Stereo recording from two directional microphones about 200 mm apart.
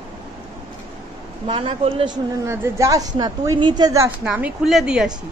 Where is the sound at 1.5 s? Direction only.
25° right (ahead or behind).